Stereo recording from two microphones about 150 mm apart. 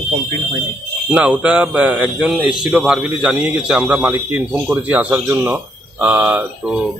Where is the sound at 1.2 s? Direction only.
10° right (ahead or behind).